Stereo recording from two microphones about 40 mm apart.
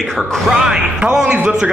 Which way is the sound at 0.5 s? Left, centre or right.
Centre.